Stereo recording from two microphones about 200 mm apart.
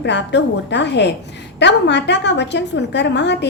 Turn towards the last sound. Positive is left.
turn(degrees=60)  # may be behind; listen again after turning